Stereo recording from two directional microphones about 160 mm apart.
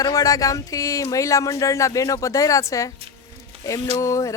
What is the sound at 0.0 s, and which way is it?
Speech, 20° left (ahead or behind).